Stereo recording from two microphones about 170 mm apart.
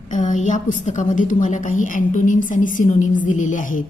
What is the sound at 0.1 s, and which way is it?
A woman's voice, 45° left (ahead or behind).